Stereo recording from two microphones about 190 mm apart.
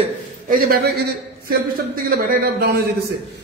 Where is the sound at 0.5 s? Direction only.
50° right (ahead or behind).